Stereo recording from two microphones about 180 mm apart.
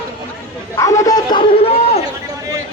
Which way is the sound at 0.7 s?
20° left (ahead or behind).